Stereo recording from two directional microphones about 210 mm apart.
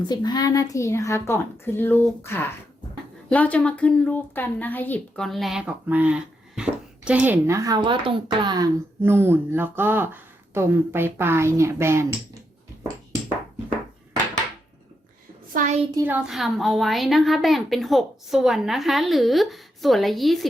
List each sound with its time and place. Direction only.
0.1 s a woman's voice: 20° left (ahead or behind); by 12.0 s 10° right (ahead or behind)
15.6 s a child's voice: 40° right (ahead or behind)
16.0 s a woman's voice: 10° right (ahead or behind)